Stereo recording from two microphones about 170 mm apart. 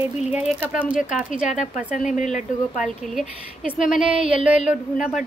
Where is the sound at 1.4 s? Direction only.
45° left (ahead or behind).